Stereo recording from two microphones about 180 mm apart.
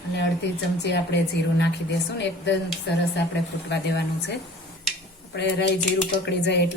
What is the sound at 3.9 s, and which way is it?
Speech, 70° left (ahead or behind).